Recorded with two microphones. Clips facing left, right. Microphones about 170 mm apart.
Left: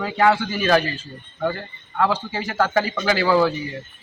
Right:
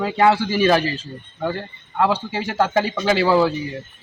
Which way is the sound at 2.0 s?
5° right (ahead or behind).